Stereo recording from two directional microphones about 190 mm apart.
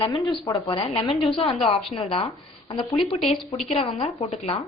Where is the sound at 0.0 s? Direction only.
20° left (ahead or behind).